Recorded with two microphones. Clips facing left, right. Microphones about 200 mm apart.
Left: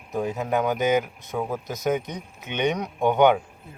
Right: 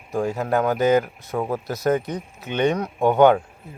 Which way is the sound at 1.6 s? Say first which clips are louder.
Right 4 dB; 15° left (ahead or behind).